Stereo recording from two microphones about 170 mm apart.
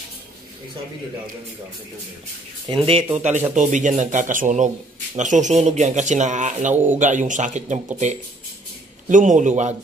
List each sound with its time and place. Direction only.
2.7 s speech: 30° right (ahead or behind)
3.2 s speech: 45° right (ahead or behind)
6.7 s speech: 10° right (ahead or behind)
7.0 s speech: 45° right (ahead or behind)
9.1 s speech: 50° right (ahead or behind)